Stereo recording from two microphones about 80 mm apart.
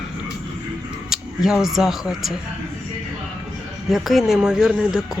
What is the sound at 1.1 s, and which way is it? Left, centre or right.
Speech, centre.